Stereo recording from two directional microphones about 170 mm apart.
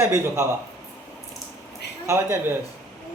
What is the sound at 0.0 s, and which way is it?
Speech, 15° right (ahead or behind).